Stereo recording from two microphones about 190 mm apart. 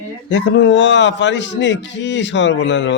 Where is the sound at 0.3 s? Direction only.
70° left (ahead or behind).